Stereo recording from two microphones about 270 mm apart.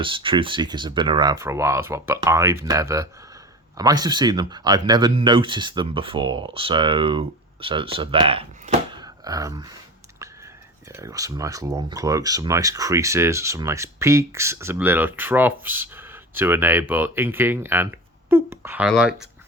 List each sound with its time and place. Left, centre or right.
0.0 s speech: centre
10.9 s speech: centre